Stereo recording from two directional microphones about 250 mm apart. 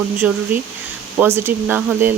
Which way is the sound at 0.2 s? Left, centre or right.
Centre.